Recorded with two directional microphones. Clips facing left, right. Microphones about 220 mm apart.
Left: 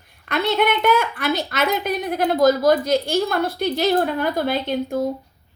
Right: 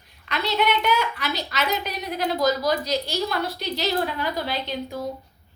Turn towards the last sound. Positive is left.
turn(degrees=50)  # may be behind; listen again after turning